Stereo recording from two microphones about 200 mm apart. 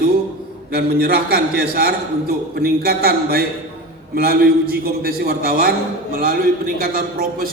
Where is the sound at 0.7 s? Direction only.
50° right (ahead or behind).